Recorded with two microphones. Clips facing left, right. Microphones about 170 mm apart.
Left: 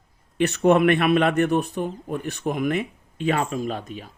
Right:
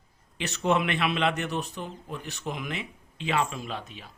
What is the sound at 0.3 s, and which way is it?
Speech, 55° left (ahead or behind).